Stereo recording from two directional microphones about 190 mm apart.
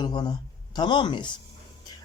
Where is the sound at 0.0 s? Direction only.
20° left (ahead or behind).